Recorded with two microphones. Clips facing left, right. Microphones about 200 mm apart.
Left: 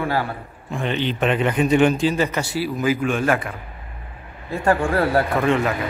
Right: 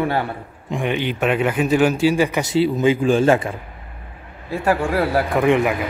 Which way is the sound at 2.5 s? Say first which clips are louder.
Right 7 dB; 25° right (ahead or behind).